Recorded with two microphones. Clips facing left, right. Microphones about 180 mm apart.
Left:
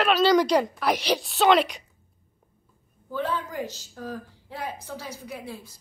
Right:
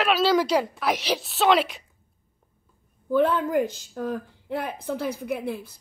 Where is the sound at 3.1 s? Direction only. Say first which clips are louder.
Right 8 dB; 55° right (ahead or behind).